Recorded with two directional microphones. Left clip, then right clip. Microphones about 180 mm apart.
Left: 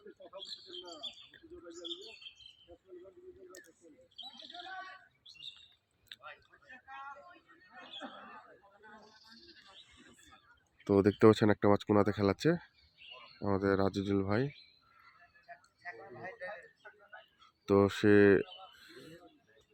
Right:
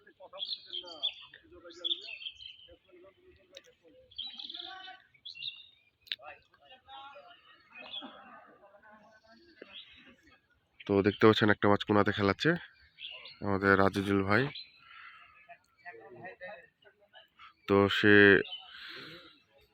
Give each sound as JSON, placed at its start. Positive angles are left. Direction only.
{"t": 0.3, "sound": "bird", "side_deg": -40}
{"t": 4.2, "sound": "bird", "side_deg": -40}
{"t": 10.8, "sound": "speech", "side_deg": 20}
{"t": 13.4, "sound": "speech", "side_deg": -5}
{"t": 15.8, "sound": "a sound", "side_deg": -5}
{"t": 17.7, "sound": "a sound", "side_deg": 10}